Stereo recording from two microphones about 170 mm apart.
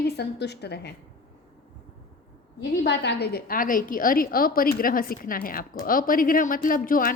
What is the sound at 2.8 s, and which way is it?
A woman's voice, 85° left.